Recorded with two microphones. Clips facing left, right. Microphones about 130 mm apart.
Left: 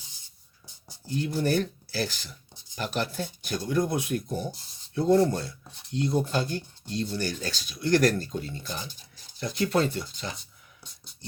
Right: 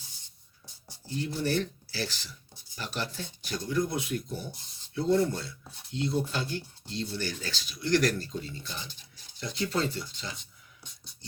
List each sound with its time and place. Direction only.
1.2 s speech: 55° left (ahead or behind)